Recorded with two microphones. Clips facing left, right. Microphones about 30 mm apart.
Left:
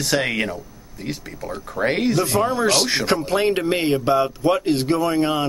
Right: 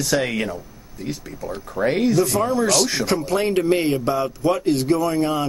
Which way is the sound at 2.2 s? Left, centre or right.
Left.